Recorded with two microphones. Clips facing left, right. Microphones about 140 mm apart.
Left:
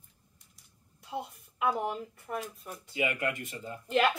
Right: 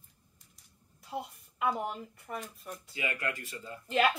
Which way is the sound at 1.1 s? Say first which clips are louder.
Left 1 dB; centre (ahead or behind).